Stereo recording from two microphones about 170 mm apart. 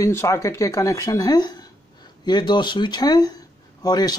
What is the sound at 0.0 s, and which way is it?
A man's voice, 15° left (ahead or behind).